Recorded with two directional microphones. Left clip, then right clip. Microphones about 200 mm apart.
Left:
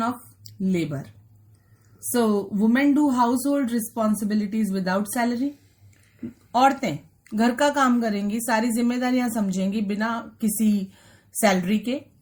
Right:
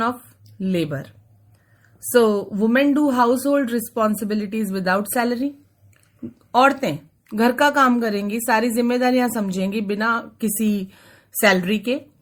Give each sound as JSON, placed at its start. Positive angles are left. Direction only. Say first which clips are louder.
{"t": 0.6, "sound": "a woman's voice", "louder": "right 3 dB", "side_deg": -40}
{"t": 2.1, "sound": "a woman's voice", "louder": "right 6 dB", "side_deg": -35}
{"t": 6.5, "sound": "a woman's voice", "louder": "right 3 dB", "side_deg": -40}